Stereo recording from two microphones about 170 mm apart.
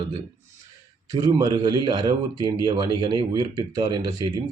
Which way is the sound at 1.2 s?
20° right (ahead or behind).